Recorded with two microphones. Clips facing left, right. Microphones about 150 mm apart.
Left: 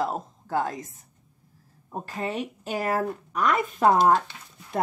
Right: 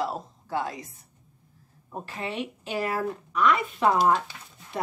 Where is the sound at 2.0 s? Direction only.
40° left (ahead or behind).